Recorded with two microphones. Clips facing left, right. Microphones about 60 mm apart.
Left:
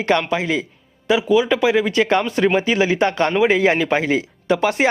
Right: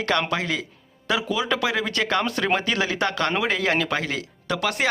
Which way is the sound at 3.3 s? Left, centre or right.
Centre.